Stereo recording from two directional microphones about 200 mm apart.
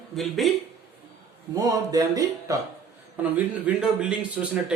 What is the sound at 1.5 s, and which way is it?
Speech, 20° right (ahead or behind).